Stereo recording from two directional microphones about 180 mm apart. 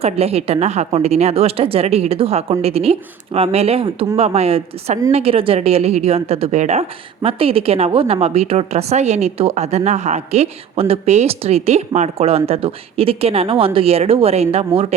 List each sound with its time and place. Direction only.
0.0 s a woman's voice: 35° right (ahead or behind)